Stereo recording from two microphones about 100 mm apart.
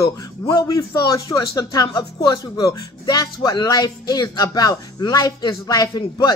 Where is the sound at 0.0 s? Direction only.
35° left (ahead or behind).